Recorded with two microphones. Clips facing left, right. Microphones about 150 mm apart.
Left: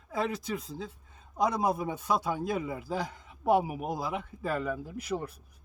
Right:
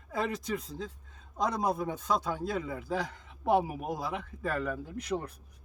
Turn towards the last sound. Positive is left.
turn(degrees=5)  # may be behind; listen again after turning